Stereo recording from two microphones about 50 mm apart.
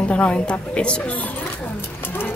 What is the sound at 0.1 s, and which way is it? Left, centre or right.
A woman's voice, left.